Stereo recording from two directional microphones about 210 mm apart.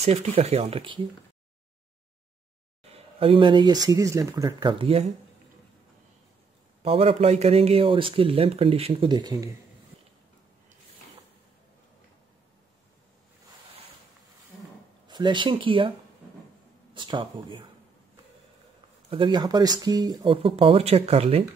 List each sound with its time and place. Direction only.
0.0 s speech: 30° right (ahead or behind)
2.9 s speech: 25° right (ahead or behind)
6.8 s speech: 25° right (ahead or behind)
15.0 s speech: 20° right (ahead or behind)
16.9 s speech: 25° right (ahead or behind)
19.0 s speech: 25° right (ahead or behind)